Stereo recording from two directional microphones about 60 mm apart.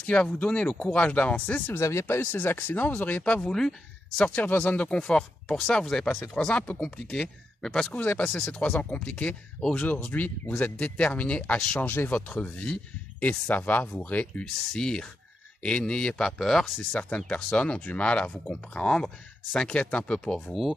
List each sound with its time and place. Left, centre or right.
0.0 s speech: centre
1.7 s speech: left
3.3 s speech: centre
4.4 s speech: left; by 6.3 s centre
6.3 s speech: centre
7.9 s speech: left
11.8 s speech: left
14.7 s speech: centre
17.5 s speech: centre
19.7 s speech: centre